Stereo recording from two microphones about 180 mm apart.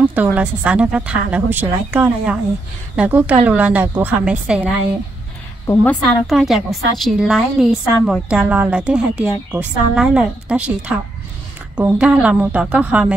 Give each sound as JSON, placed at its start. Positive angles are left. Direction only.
{"t": 0.1, "sound": "a woman's voice", "side_deg": -10}
{"t": 5.7, "sound": "a woman's voice", "side_deg": 15}
{"t": 6.2, "sound": "a woman's voice", "side_deg": 0}